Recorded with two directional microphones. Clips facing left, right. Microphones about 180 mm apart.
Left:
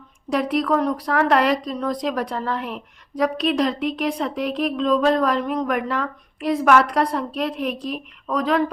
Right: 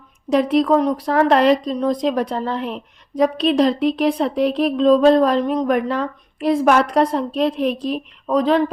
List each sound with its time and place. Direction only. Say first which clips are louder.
0.3 s a woman's voice: right 5 dB; 25° right (ahead or behind)